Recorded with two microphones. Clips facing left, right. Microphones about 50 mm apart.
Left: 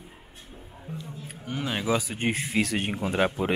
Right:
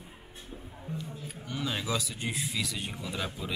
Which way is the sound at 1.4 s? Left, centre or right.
Left.